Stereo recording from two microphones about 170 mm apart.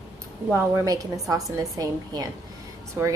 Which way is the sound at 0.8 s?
20° right (ahead or behind).